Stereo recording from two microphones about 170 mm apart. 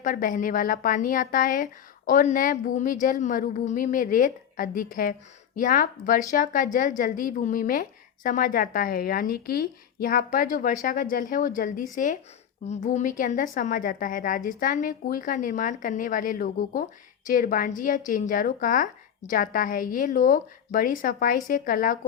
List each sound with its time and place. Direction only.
0.0 s a woman's voice: 50° left (ahead or behind)